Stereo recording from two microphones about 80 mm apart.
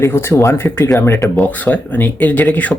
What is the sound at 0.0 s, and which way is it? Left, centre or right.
Speech, left.